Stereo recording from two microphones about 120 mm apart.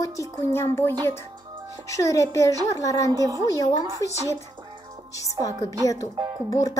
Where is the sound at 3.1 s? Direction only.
30° right (ahead or behind).